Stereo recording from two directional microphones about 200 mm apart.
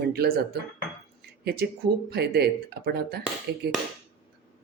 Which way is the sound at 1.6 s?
55° right (ahead or behind).